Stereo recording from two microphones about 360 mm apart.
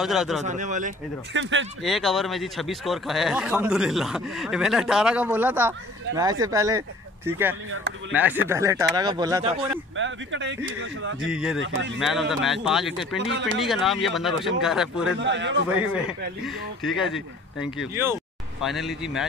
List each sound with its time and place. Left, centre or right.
0.0 s speech: centre
0.4 s speech: centre
1.8 s speech: centre
9.9 s speech: right
11.2 s speech: centre
11.6 s speech: right
12.0 s speech: centre
13.3 s speech: right
13.6 s speech: centre
15.1 s speech: right
15.7 s speech: centre